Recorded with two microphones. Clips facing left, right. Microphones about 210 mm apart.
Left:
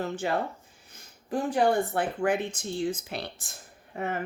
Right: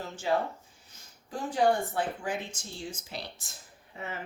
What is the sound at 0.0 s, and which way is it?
Speech, 60° left (ahead or behind).